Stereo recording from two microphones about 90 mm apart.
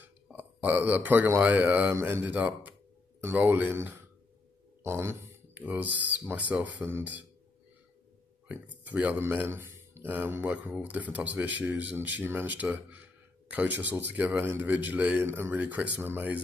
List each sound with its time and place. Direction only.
0.3 s a man's voice: 20° right (ahead or behind)
1.9 s speech: 30° right (ahead or behind)
2.3 s speech: 15° right (ahead or behind)
5.5 s speech: 20° right (ahead or behind)
8.5 s speech: 15° right (ahead or behind)